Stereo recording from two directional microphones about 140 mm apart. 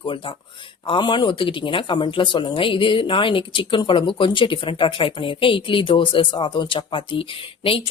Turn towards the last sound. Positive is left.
turn(degrees=40)  # may be behind; listen again after turning